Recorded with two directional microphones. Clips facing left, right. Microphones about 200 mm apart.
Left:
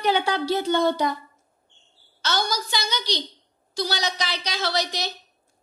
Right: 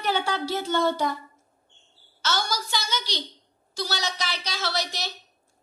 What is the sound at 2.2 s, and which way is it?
Speech, 15° left (ahead or behind).